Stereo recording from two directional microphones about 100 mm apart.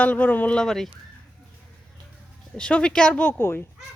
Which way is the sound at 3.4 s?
25° left (ahead or behind).